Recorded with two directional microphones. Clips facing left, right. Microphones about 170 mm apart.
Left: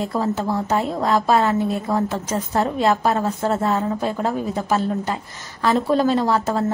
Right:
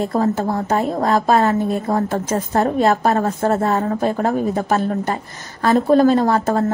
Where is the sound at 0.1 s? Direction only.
50° right (ahead or behind).